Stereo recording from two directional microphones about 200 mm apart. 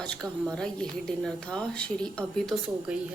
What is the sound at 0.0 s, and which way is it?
Speech, 5° left (ahead or behind).